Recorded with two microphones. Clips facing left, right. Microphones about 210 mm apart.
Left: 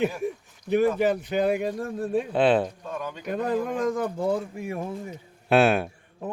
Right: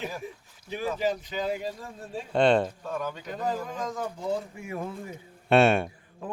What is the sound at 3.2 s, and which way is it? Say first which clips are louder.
Speech: left 6 dB; 60° left (ahead or behind).